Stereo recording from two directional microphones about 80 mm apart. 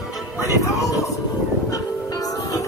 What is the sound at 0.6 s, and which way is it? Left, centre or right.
Speech, left.